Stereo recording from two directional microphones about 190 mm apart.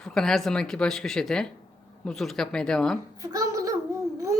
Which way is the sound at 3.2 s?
15° right (ahead or behind).